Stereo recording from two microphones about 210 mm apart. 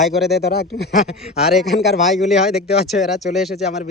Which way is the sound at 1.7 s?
35° left (ahead or behind).